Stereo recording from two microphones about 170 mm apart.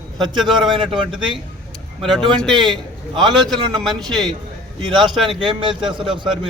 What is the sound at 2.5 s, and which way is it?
Speech, 25° right (ahead or behind).